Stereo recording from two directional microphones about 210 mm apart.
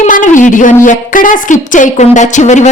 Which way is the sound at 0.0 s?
35° left (ahead or behind).